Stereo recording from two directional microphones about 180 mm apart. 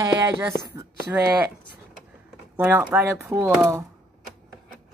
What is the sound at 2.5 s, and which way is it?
Speech, 10° right (ahead or behind).